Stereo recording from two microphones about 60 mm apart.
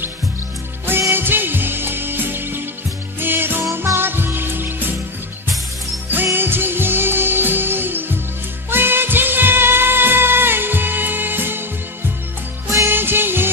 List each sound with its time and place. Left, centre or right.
1.1 s music: right
6.3 s music: right
12.6 s music: right
12.9 s music: right